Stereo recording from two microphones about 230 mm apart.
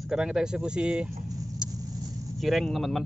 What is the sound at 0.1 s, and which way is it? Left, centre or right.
Speech, centre.